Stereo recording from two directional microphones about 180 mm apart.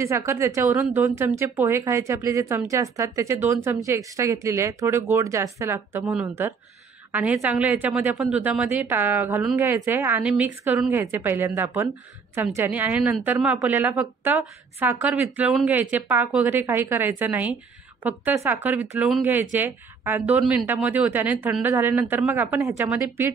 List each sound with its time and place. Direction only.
0.0 s speech: 15° right (ahead or behind)